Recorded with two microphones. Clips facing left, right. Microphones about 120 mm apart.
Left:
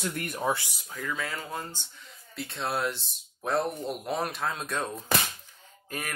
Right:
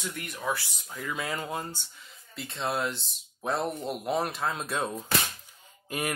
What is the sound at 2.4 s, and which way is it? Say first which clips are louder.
Speech: even; centre (ahead or behind).